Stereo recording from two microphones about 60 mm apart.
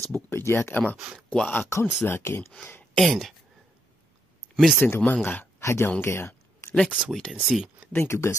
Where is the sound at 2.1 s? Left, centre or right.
Left.